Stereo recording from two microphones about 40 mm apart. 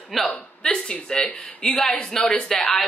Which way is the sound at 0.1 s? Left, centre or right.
Centre.